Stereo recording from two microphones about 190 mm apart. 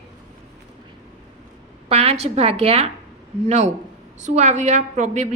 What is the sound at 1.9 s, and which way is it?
A woman's voice, 35° right (ahead or behind).